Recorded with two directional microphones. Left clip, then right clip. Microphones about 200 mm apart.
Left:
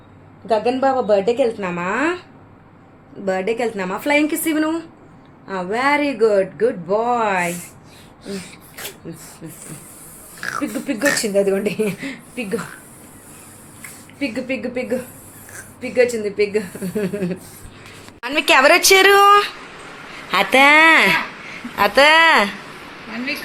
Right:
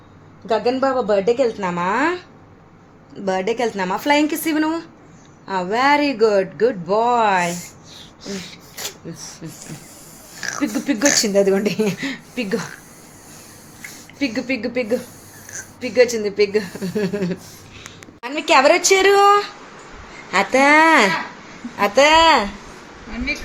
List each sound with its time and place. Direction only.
0.4 s a woman's voice: 15° right (ahead or behind)
3.2 s speech: 20° right (ahead or behind)
9.1 s a woman's voice: 15° right (ahead or behind)
10.4 s a sound: centre (ahead or behind)
11.2 s speech: 30° right (ahead or behind)
14.2 s speech: 25° right (ahead or behind)
18.2 s a woman's voice: centre (ahead or behind)